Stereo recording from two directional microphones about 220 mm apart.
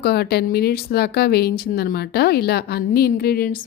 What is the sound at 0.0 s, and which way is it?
Speech, 45° left (ahead or behind).